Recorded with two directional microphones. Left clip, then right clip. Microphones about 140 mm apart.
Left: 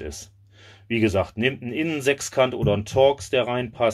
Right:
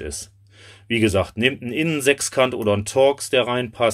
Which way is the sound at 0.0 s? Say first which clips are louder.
Right 3 dB; 30° right (ahead or behind).